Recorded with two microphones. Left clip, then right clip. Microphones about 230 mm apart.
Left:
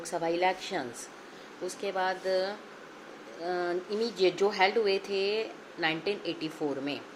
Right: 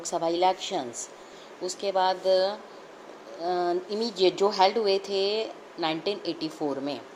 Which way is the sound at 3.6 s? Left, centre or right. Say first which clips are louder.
Right 3 dB; centre.